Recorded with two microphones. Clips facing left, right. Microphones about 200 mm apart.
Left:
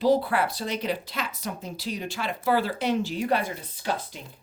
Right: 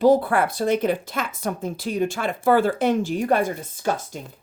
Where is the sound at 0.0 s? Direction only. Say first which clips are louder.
Right 5 dB; 50° right (ahead or behind).